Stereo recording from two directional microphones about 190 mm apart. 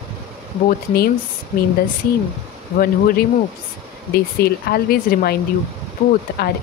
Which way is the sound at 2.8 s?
50° left (ahead or behind).